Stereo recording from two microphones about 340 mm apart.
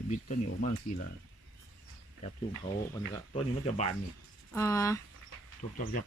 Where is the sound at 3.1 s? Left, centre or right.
Centre.